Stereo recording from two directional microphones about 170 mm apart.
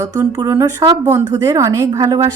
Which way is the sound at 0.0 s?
20° right (ahead or behind).